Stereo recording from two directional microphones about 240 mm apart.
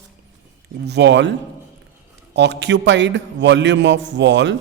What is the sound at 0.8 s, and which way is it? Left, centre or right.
A man's voice, right.